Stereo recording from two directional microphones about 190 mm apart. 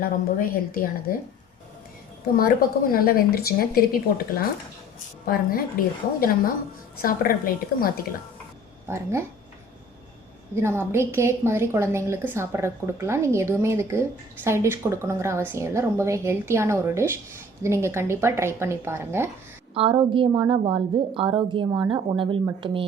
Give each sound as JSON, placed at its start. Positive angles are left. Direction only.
{"t": 0.0, "sound": "speech", "side_deg": 50}
{"t": 2.2, "sound": "speech", "side_deg": 50}
{"t": 5.2, "sound": "speech", "side_deg": 50}
{"t": 8.9, "sound": "a woman's voice", "side_deg": -15}
{"t": 10.5, "sound": "a woman's voice", "side_deg": -15}
{"t": 19.7, "sound": "a woman's voice", "side_deg": -30}